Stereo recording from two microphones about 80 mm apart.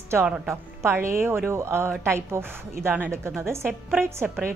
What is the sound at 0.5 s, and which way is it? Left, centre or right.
A woman's voice, right.